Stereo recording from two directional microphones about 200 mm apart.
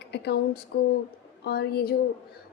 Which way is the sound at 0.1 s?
55° left (ahead or behind).